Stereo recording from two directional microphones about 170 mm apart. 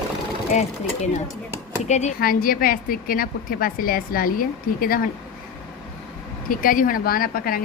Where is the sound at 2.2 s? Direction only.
60° left (ahead or behind).